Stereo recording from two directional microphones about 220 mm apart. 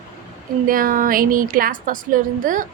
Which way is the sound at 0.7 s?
40° right (ahead or behind).